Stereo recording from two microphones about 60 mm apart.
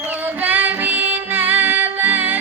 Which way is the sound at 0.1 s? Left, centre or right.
Right.